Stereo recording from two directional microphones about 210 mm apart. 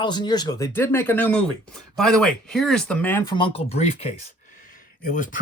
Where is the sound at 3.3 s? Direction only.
25° left (ahead or behind).